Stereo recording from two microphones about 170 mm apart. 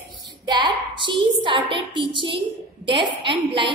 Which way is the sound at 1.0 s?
30° right (ahead or behind).